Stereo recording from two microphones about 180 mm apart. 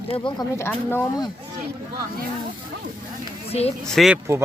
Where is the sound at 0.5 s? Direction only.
15° left (ahead or behind).